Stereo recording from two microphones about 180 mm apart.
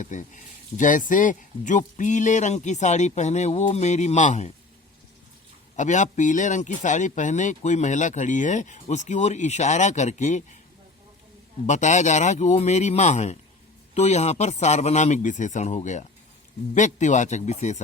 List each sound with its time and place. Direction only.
0.0 s speech: 45° left (ahead or behind)
5.7 s speech: 40° left (ahead or behind)
11.6 s speech: 40° left (ahead or behind)